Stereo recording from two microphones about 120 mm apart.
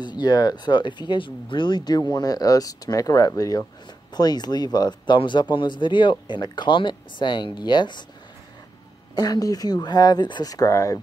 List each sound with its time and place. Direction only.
0.0 s speech: 35° left (ahead or behind)
9.1 s speech: 35° left (ahead or behind)